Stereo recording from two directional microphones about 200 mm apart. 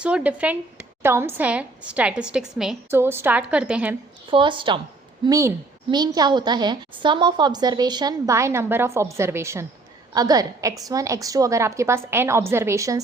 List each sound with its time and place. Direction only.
0.0 s a woman's voice: 5° right (ahead or behind)
4.3 s a woman's voice: 25° right (ahead or behind)